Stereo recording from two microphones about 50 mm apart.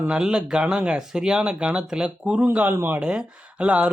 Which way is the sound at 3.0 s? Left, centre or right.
Right.